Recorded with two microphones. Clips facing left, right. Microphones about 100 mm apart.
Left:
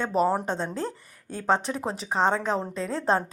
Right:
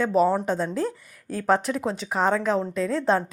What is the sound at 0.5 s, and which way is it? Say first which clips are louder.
Speech: right 4 dB; 30° left (ahead or behind).